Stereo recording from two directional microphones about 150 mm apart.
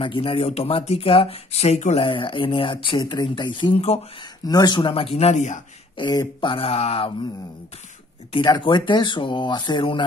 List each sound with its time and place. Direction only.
0.0 s speech: 35° left (ahead or behind)
2.0 s speech: 35° left (ahead or behind)
4.5 s speech: 25° left (ahead or behind); by 5.6 s 50° left (ahead or behind)
5.9 s speech: 30° left (ahead or behind)
8.3 s speech: 30° left (ahead or behind)